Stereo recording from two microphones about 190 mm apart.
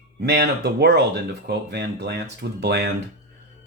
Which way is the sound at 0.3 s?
60° right (ahead or behind).